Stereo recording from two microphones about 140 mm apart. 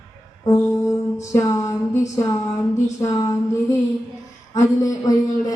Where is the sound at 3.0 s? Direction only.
25° left (ahead or behind).